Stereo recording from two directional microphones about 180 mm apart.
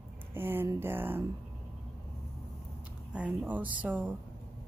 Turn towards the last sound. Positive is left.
turn(degrees=-10)  # may be behind; listen again after turning